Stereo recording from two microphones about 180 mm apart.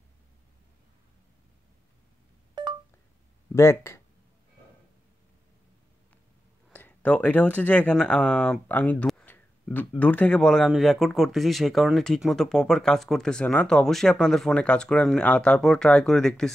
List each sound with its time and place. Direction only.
2.6 s telephone dialing: 25° right (ahead or behind)
3.5 s speech: 15° left (ahead or behind)
6.7 s speech: 10° left (ahead or behind)